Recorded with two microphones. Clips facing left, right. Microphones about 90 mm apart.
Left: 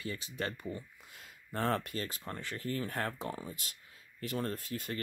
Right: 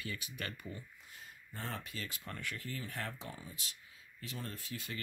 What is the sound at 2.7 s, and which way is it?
Speech, 50° left (ahead or behind).